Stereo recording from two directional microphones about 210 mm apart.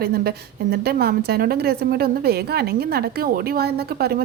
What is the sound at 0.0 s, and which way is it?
A woman's voice, 45° right (ahead or behind).